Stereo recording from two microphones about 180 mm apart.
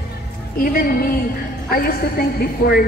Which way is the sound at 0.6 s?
50° left (ahead or behind).